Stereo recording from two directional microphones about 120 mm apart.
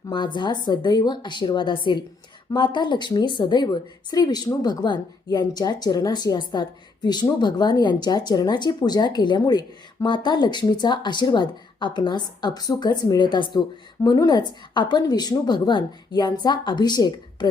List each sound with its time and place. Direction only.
0.1 s speech: 40° left (ahead or behind)